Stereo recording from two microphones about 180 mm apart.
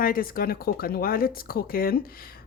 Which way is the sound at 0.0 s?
50° left (ahead or behind).